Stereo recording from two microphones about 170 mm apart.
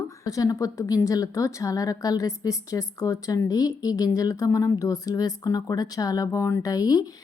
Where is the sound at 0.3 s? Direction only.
20° left (ahead or behind).